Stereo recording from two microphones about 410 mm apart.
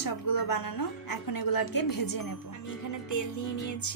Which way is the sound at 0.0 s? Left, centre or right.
Left.